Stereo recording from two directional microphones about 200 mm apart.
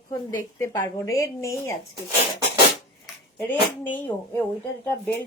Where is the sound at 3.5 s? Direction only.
10° left (ahead or behind).